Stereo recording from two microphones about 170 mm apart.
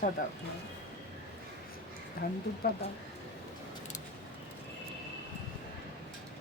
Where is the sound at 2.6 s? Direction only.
70° left (ahead or behind).